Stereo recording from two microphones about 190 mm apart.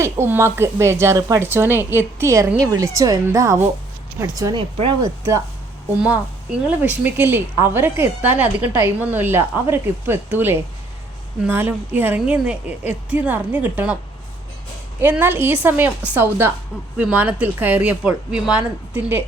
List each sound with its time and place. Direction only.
0.0 s speech: 15° right (ahead or behind)
6.0 s speech: 5° right (ahead or behind)
15.0 s speech: 10° right (ahead or behind)